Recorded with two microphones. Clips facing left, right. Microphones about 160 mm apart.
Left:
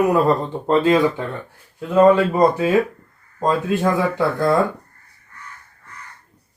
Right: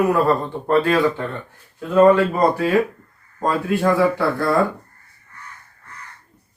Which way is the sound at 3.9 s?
20° left (ahead or behind).